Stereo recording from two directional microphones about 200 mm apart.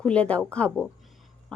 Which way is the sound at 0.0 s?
5° left (ahead or behind).